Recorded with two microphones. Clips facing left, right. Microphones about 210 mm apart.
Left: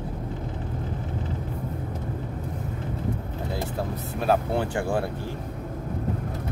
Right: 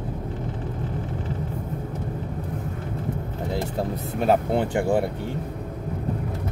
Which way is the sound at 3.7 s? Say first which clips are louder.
Right 3 dB; 25° right (ahead or behind).